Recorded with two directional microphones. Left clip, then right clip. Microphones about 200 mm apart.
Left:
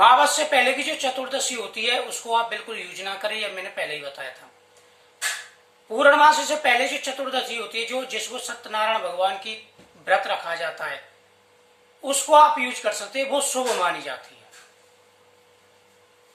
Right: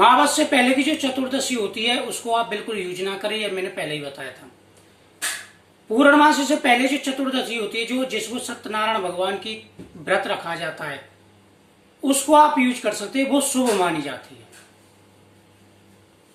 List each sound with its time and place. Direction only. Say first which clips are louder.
0.0 s speech: even; 5° left (ahead or behind)
6.0 s speech: even; 5° left (ahead or behind)
12.0 s speech: even; 5° left (ahead or behind)